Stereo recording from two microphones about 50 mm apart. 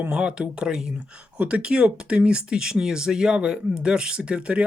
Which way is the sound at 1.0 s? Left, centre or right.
Right.